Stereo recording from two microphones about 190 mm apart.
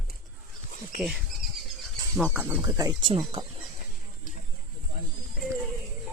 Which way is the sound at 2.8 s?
25° right (ahead or behind).